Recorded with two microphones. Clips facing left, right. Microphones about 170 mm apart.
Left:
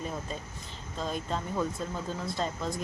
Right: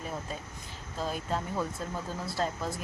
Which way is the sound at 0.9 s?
5° right (ahead or behind).